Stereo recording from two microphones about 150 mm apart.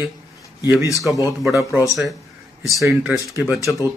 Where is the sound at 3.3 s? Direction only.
15° right (ahead or behind).